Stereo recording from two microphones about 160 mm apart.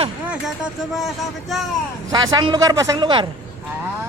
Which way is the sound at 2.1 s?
25° right (ahead or behind).